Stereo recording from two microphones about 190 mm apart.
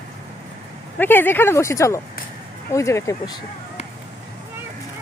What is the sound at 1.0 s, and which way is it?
Speech, 10° left (ahead or behind).